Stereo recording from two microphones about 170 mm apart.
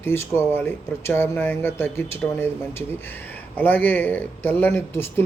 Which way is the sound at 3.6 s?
10° left (ahead or behind).